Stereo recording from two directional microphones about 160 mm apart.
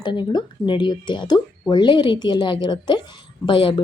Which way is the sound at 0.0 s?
30° left (ahead or behind).